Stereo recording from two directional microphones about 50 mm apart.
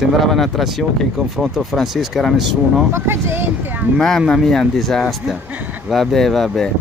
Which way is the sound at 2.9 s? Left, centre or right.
Right.